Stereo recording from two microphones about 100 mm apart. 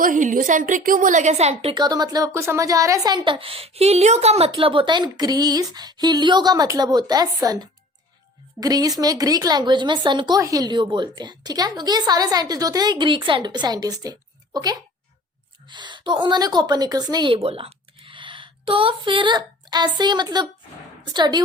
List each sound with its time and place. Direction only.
1.4 s a woman's voice: 90° right
1.7 s speech: 45° right (ahead or behind)
3.3 s a woman's voice: 70° right (ahead or behind); by 10.4 s 50° right (ahead or behind)
10.4 s a woman's voice: 40° right (ahead or behind)
17.3 s a woman's voice: 70° right (ahead or behind); by 21.4 s 45° right (ahead or behind)